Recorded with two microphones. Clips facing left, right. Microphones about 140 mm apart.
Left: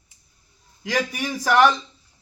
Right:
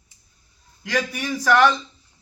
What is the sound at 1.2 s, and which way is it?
Speech, 15° left (ahead or behind).